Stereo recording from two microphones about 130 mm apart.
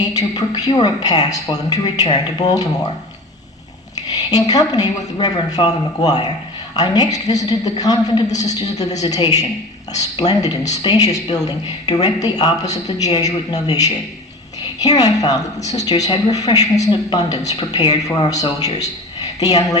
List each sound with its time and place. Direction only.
0.0 s a woman's voice: 30° left (ahead or behind)
3.9 s a woman's voice: 30° left (ahead or behind)